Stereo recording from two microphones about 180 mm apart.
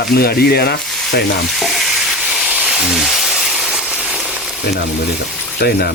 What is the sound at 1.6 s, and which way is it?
Steam, centre (ahead or behind).